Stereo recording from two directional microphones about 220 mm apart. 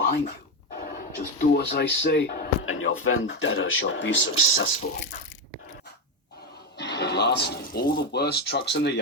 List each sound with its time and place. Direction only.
0.0 s speech: 45° left (ahead or behind)
2.6 s speech: 65° left (ahead or behind)
6.7 s speech: 50° left (ahead or behind)